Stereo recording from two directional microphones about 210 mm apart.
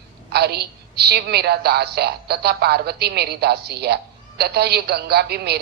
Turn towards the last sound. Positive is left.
turn(degrees=-50)  # may be behind; listen again after turning